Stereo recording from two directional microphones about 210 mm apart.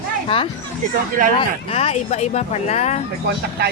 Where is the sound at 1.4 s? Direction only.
30° left (ahead or behind).